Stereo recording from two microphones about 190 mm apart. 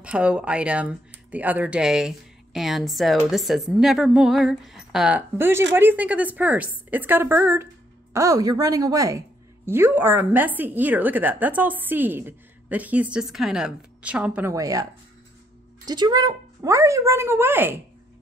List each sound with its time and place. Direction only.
0.0 s a woman's voice: 5° right (ahead or behind)
14.5 s a woman's voice: 20° right (ahead or behind)